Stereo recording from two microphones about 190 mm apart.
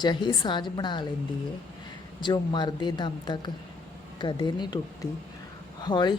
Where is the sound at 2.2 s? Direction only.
25° left (ahead or behind).